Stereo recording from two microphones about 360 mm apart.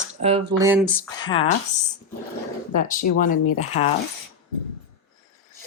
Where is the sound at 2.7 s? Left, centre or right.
Left.